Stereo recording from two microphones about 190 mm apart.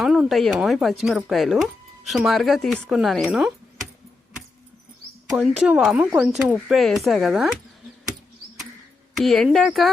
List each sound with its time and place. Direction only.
0.0 s speech: centre (ahead or behind)
5.3 s speech: centre (ahead or behind)
9.1 s speech: centre (ahead or behind)